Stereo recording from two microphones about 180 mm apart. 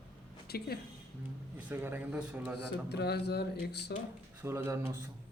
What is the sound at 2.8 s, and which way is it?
Speech, 65° left (ahead or behind).